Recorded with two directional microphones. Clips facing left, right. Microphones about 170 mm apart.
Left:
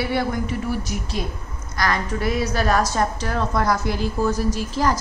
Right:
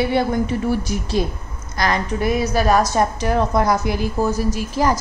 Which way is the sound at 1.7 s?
20° right (ahead or behind).